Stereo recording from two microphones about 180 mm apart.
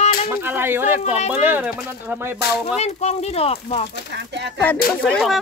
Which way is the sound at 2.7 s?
35° left (ahead or behind).